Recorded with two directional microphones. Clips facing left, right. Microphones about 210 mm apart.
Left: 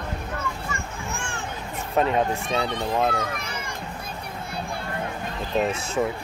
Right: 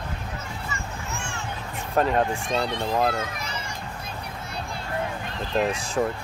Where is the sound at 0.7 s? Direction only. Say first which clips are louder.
Left 1 dB; 55° left (ahead or behind).